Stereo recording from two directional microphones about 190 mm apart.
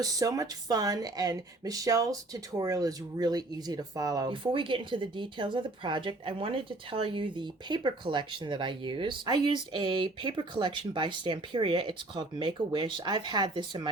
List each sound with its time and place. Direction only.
0.0 s speech: 20° right (ahead or behind)